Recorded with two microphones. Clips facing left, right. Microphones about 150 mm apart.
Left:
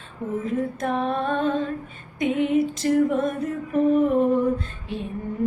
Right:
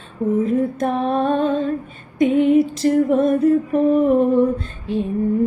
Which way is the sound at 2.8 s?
35° right (ahead or behind).